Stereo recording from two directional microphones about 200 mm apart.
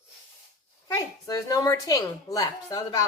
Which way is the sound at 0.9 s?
20° left (ahead or behind).